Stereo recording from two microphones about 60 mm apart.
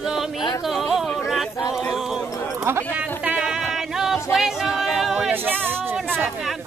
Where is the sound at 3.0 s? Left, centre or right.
Right.